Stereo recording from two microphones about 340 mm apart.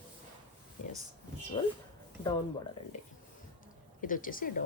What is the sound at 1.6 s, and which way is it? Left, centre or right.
Speech, centre.